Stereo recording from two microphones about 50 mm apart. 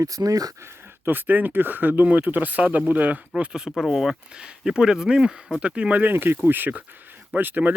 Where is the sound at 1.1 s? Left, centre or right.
Right.